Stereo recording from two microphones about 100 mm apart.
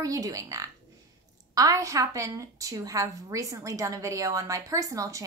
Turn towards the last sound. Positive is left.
turn(degrees=-35)  # may be behind; listen again after turning